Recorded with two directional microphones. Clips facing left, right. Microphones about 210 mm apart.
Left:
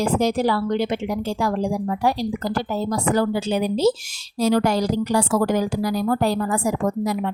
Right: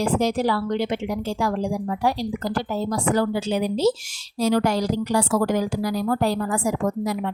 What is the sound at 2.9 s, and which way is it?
A woman's voice, 40° left (ahead or behind).